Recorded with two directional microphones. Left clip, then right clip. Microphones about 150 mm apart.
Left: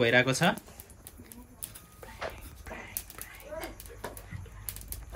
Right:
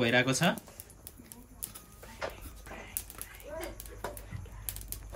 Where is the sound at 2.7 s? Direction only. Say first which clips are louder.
Left 3 dB; 20° right (ahead or behind).